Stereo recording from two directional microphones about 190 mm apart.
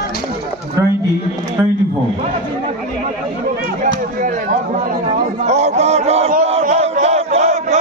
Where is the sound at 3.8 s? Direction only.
45° right (ahead or behind).